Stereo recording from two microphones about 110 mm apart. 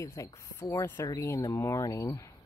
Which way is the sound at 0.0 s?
30° left (ahead or behind).